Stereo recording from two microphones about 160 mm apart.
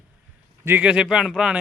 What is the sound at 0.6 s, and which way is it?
Speech, 10° right (ahead or behind).